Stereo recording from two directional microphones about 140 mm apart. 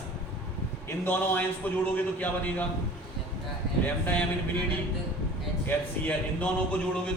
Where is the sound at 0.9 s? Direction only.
15° left (ahead or behind).